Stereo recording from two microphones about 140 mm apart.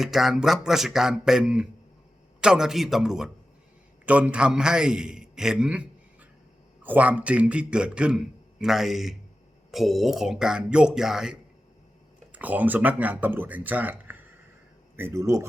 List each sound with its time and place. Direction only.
0.0 s a man's voice: centre (ahead or behind); by 15.4 s 20° right (ahead or behind)